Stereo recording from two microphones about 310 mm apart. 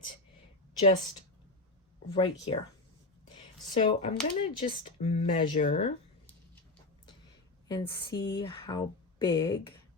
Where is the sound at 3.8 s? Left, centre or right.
Centre.